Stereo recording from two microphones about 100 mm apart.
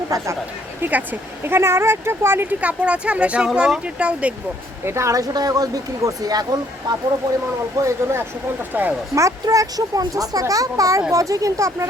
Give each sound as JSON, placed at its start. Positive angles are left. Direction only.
{"t": 0.1, "sound": "a child's voice", "side_deg": -35}
{"t": 0.8, "sound": "speech", "side_deg": -15}
{"t": 4.9, "sound": "a child's voice", "side_deg": -30}
{"t": 7.9, "sound": "speech", "side_deg": -25}
{"t": 9.1, "sound": "a child's voice", "side_deg": -35}